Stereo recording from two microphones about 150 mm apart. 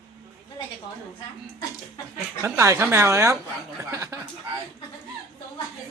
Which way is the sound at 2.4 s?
15° right (ahead or behind).